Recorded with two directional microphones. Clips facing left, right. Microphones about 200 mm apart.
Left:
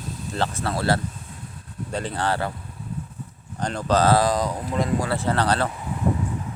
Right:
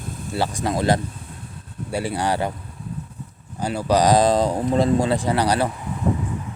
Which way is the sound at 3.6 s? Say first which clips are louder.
Right 2 dB; 10° right (ahead or behind).